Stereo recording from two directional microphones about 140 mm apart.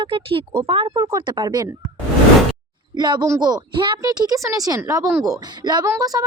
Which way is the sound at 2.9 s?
30° right (ahead or behind).